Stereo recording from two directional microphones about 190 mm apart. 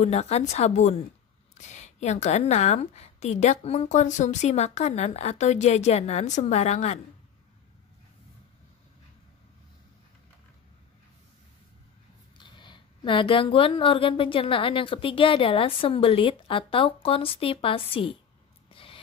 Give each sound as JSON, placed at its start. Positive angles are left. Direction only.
{"t": 0.0, "sound": "a woman's voice", "side_deg": 35}
{"t": 12.4, "sound": "speech", "side_deg": 25}
{"t": 18.7, "sound": "snort", "side_deg": 30}